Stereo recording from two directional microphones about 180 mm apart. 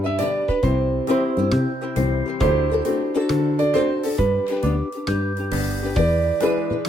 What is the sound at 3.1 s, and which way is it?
Music, centre (ahead or behind).